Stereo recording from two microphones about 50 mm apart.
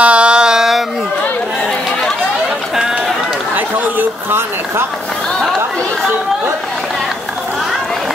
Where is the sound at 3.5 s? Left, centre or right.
Right.